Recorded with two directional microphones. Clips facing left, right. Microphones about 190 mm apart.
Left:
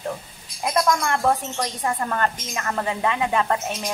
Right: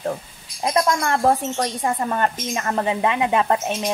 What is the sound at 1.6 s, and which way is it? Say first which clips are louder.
A woman's voice: right 3 dB; 15° right (ahead or behind).